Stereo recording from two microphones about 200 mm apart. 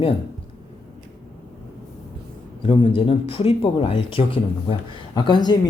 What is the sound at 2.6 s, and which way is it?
Speech, 25° left (ahead or behind).